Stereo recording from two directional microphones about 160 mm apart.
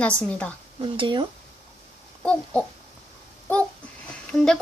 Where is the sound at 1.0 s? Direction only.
30° right (ahead or behind).